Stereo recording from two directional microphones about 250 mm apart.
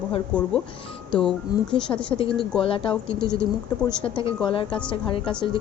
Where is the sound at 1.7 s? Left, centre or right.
Centre.